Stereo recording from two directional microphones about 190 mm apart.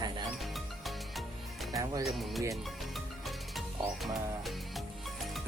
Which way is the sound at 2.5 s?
Centre (ahead or behind).